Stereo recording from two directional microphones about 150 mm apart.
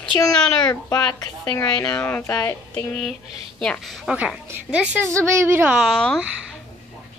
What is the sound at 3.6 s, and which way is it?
Speech, centre (ahead or behind).